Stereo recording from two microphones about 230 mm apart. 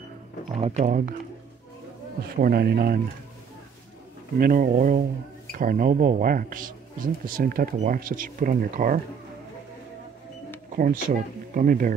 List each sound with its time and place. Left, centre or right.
0.5 s speech: right
2.3 s speech: right
4.4 s speech: right
10.8 s speech: right